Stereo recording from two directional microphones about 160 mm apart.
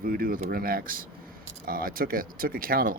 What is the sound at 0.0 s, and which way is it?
Speech, 65° right (ahead or behind).